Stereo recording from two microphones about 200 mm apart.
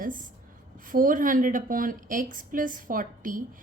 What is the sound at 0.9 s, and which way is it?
A woman's voice, 45° right (ahead or behind).